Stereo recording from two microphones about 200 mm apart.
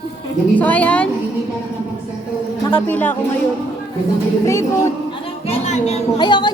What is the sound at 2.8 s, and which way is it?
Speech, 10° left (ahead or behind).